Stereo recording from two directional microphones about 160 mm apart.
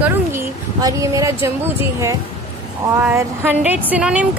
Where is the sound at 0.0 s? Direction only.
15° right (ahead or behind).